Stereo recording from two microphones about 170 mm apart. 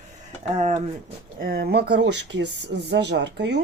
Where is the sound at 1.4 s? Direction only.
65° right (ahead or behind).